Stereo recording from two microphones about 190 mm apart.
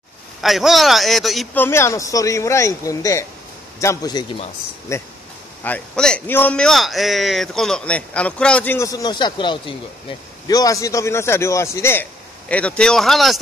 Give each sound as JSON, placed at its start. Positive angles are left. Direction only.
{"t": 0.4, "sound": "a man's voice", "side_deg": 0}
{"t": 1.6, "sound": "a man's voice", "side_deg": 15}
{"t": 5.6, "sound": "a man's voice", "side_deg": 5}